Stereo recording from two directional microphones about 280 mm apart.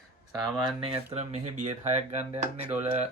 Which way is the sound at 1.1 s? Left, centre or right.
Right.